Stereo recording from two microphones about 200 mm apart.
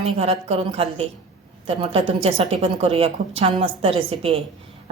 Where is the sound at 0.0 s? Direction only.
30° right (ahead or behind).